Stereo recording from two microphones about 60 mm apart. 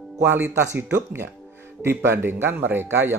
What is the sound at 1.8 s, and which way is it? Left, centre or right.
Speech, right.